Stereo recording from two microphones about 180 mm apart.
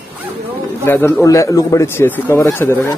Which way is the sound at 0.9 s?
10° left (ahead or behind).